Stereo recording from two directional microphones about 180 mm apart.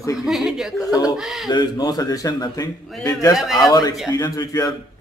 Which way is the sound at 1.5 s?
25° left (ahead or behind).